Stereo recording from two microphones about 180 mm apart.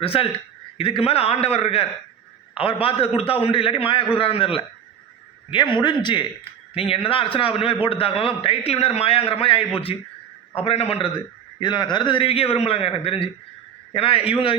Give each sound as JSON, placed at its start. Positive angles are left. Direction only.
{"t": 0.0, "sound": "a man's voice", "side_deg": 30}